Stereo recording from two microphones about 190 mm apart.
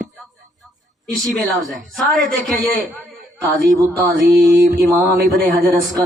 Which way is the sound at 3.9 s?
5° left (ahead or behind).